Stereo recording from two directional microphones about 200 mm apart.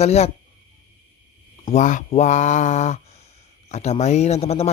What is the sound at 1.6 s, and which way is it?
Speech, 35° left (ahead or behind).